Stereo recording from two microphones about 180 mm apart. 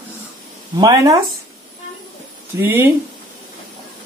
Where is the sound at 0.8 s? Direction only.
20° right (ahead or behind).